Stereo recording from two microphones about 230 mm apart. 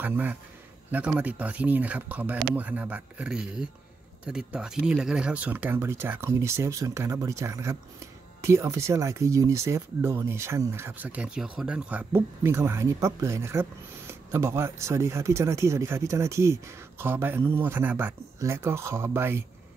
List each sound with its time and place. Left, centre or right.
0.0 s speech: centre